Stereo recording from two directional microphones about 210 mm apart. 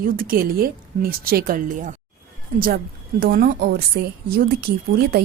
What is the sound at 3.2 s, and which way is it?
A woman's voice, 45° right (ahead or behind).